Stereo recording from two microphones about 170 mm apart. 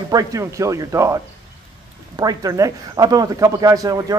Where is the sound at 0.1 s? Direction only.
20° right (ahead or behind).